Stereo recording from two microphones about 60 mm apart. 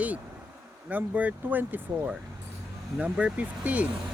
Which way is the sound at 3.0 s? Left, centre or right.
Centre.